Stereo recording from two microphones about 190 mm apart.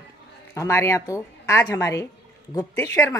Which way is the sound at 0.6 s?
15° left (ahead or behind).